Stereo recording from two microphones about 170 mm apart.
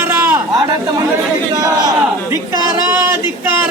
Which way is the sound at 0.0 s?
15° right (ahead or behind).